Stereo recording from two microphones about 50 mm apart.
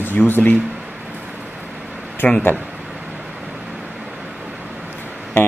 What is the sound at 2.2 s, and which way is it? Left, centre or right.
Speech, left.